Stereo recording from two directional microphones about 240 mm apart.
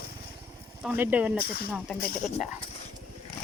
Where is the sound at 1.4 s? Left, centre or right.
Left.